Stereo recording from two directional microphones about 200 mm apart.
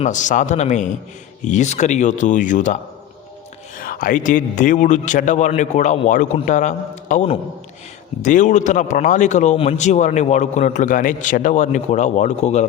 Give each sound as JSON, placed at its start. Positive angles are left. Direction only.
{"t": 0.0, "sound": "speech", "side_deg": 40}